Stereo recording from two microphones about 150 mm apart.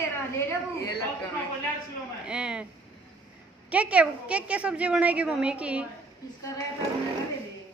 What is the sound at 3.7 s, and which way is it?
A woman's voice, 10° right (ahead or behind).